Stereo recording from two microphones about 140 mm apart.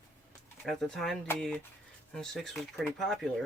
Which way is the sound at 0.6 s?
5° left (ahead or behind).